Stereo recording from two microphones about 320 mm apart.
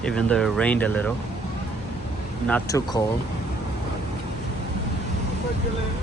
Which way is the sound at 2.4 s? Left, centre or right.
Centre.